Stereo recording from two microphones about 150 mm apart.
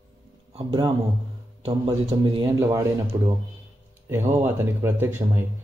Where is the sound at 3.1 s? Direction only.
20° right (ahead or behind).